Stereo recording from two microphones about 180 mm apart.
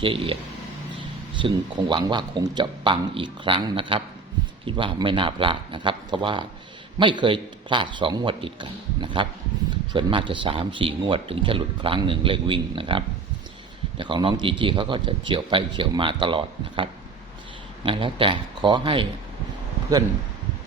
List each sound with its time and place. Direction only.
0.0 s speech: 30° right (ahead or behind)
1.4 s speech: 25° right (ahead or behind)